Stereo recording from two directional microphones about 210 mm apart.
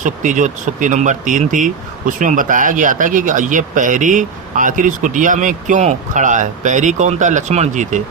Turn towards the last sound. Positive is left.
turn(degrees=-35)  # may be behind; listen again after turning